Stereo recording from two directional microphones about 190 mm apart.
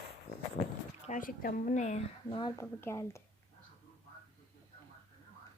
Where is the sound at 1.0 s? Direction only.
45° left (ahead or behind).